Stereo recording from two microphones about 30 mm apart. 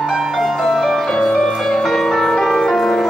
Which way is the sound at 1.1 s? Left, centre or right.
Left.